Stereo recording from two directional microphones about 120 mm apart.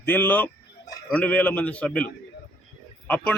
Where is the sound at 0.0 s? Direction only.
15° left (ahead or behind).